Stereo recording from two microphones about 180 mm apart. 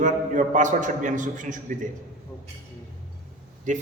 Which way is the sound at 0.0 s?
45° right (ahead or behind).